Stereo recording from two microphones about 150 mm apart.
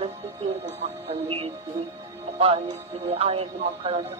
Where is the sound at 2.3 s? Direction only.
40° right (ahead or behind).